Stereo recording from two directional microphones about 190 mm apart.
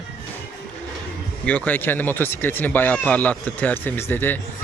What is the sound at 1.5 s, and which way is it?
Speech, 10° left (ahead or behind).